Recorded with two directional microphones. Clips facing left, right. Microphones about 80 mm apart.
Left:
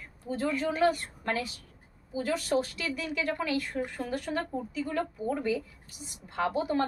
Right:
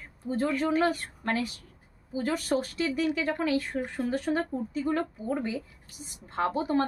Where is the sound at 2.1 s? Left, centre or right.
Right.